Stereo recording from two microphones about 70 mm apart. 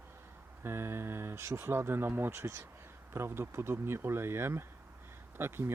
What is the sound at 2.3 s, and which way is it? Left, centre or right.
Speech, right.